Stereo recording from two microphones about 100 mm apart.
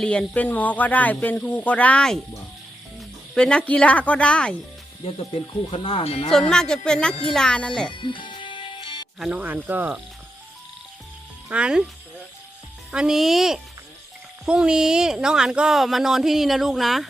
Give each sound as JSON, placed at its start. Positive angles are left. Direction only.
{"t": 0.0, "sound": "speech", "side_deg": 10}
{"t": 5.0, "sound": "speech", "side_deg": 65}
{"t": 6.3, "sound": "speech", "side_deg": 5}
{"t": 7.9, "sound": "music", "side_deg": 55}
{"t": 9.3, "sound": "speech", "side_deg": -15}
{"t": 11.4, "sound": "speech", "side_deg": -10}
{"t": 12.9, "sound": "speech", "side_deg": -5}